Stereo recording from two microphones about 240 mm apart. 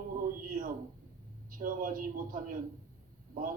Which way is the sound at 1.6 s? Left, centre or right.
Right.